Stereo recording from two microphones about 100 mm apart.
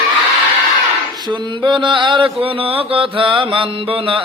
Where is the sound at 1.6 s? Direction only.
55° right (ahead or behind).